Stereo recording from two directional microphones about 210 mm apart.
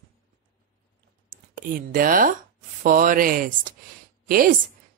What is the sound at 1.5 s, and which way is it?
A woman's voice, 40° right (ahead or behind).